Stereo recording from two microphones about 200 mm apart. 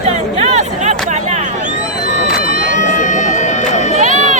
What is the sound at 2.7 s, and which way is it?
Run, 40° left (ahead or behind).